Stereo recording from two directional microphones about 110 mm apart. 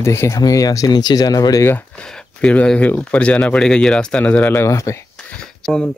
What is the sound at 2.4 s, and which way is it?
Speech, 10° left (ahead or behind).